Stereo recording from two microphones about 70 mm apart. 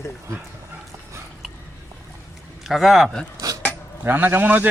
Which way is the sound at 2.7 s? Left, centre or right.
Centre.